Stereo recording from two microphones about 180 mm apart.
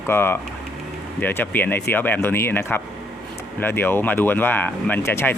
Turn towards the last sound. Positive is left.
turn(degrees=15)  # may be behind; listen again after turning